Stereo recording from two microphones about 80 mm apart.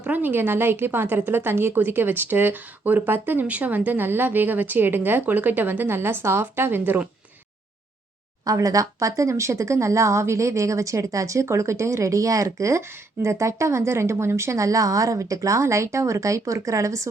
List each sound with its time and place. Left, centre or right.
0.0 s speech: right
8.4 s speech: right